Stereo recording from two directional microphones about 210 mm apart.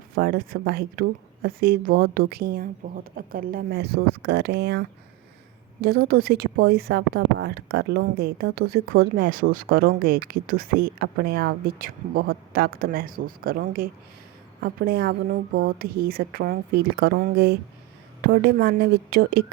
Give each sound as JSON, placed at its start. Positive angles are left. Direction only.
{"t": 0.1, "sound": "a woman's voice", "side_deg": -45}